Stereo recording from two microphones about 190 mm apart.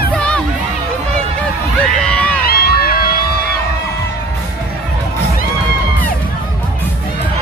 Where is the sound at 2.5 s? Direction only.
55° left (ahead or behind).